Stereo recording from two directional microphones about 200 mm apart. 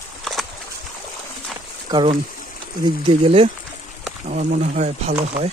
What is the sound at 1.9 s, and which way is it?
Speech, 25° right (ahead or behind).